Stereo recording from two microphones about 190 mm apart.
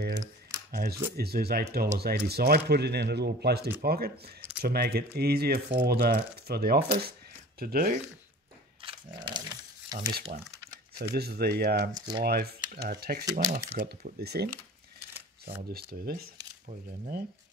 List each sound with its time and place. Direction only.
0.7 s speech: 55° right (ahead or behind)
8.8 s a sound: 25° right (ahead or behind)
9.9 s speech: 45° right (ahead or behind)
11.0 s speech: 55° right (ahead or behind)
13.2 s speech: 20° right (ahead or behind)
13.7 s speech: 55° right (ahead or behind)
15.7 s speech: 55° right (ahead or behind)
16.6 s speech: 40° right (ahead or behind)